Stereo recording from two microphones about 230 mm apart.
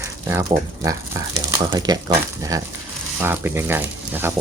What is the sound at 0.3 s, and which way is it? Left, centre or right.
Speech, centre.